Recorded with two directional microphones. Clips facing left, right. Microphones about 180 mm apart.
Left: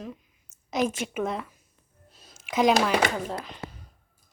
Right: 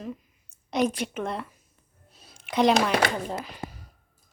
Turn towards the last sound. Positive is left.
turn(degrees=-10)  # may be behind; listen again after turning